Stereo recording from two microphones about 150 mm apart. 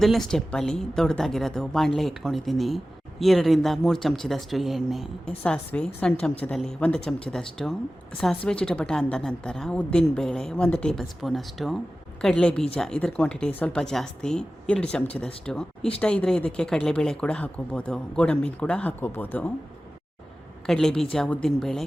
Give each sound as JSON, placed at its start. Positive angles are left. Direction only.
{"t": 0.0, "sound": "a woman's voice", "side_deg": 0}
{"t": 20.7, "sound": "a woman's voice", "side_deg": 0}